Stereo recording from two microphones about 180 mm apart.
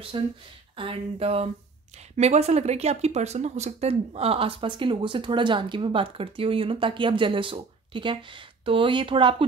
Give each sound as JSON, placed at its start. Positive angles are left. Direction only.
{"t": 0.1, "sound": "speech", "side_deg": -30}